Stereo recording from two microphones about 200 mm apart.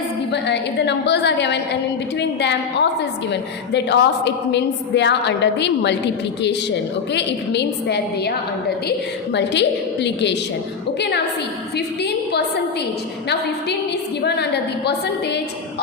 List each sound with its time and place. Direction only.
0.3 s a woman's voice: 60° left (ahead or behind)
7.1 s a woman's voice: 60° left (ahead or behind)
9.3 s a woman's voice: 60° left (ahead or behind)
14.3 s a woman's voice: 55° left (ahead or behind)